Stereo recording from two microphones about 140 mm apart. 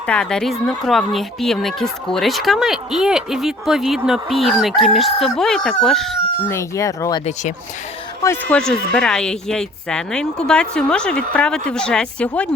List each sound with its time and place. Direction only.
0.0 s speech: 5° left (ahead or behind)
6.5 s speech: 20° left (ahead or behind)
8.2 s speech: 20° left (ahead or behind)
8.5 s speech: 5° left (ahead or behind)